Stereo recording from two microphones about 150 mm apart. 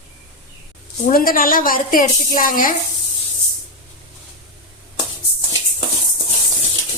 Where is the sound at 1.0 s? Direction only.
70° left (ahead or behind).